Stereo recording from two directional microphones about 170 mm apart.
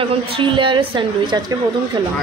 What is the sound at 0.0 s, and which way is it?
A woman's voice, 30° right (ahead or behind).